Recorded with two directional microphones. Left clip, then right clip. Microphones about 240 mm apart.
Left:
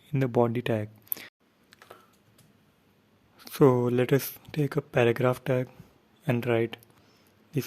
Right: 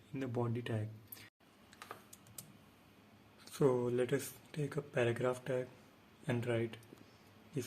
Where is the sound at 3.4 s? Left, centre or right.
Left.